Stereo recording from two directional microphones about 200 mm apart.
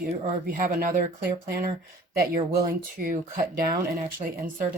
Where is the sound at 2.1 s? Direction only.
45° right (ahead or behind).